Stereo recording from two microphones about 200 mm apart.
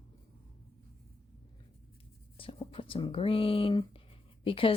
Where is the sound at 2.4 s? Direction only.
25° left (ahead or behind).